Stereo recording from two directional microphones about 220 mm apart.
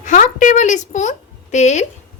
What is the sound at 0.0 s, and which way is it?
A woman's voice, 35° left (ahead or behind).